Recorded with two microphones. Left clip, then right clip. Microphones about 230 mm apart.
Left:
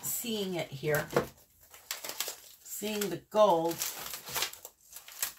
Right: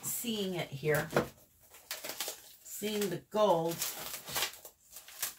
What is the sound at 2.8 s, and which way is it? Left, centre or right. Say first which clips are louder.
Speech: even; left.